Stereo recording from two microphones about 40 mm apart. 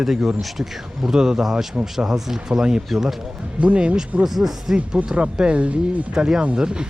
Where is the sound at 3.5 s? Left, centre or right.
Right.